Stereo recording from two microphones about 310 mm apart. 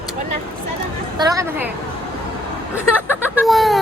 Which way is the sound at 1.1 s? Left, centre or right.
Centre.